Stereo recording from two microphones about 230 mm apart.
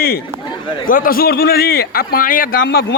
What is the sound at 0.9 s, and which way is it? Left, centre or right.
A man's voice, left.